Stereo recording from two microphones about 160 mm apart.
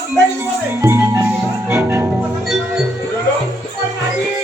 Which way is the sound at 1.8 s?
10° right (ahead or behind).